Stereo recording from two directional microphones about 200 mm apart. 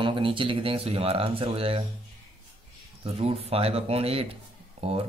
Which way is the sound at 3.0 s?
30° right (ahead or behind).